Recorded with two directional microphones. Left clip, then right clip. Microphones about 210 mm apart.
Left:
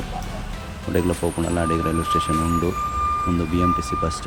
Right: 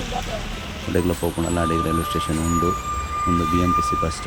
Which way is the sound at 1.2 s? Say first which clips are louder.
Even; 10° right (ahead or behind).